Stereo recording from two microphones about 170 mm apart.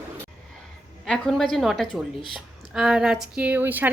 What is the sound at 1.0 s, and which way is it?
A woman's voice, 5° left (ahead or behind).